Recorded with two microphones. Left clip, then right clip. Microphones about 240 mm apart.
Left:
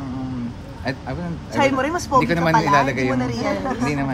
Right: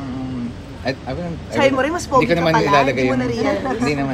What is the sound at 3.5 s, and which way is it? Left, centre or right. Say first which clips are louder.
Speech: right 3 dB; centre.